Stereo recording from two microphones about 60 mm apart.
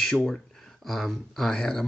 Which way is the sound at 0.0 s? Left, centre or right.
Centre.